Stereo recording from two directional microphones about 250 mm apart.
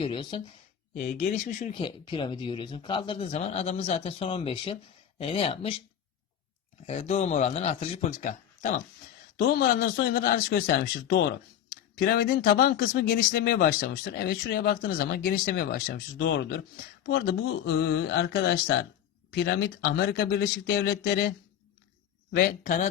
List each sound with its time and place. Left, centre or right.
0.0 s speech: centre
6.8 s speech: left
22.4 s speech: left